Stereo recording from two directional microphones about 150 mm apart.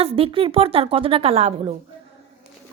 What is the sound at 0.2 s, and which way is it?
A woman's voice, 35° right (ahead or behind).